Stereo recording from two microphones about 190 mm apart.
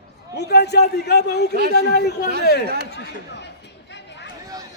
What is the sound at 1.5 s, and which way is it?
Speech, 55° right (ahead or behind).